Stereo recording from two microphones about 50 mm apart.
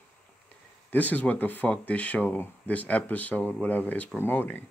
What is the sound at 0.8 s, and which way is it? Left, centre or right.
Speech, left.